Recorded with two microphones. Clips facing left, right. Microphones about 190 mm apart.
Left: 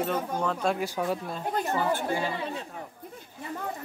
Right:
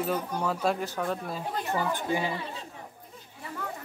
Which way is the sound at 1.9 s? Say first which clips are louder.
Left 1 dB; 15° right (ahead or behind).